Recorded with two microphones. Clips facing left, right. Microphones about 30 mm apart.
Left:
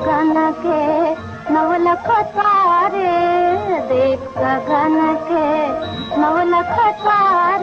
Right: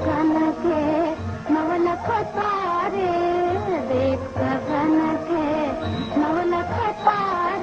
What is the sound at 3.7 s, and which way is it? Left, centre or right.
Music, left.